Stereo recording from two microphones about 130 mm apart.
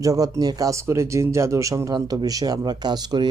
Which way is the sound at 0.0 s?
25° right (ahead or behind).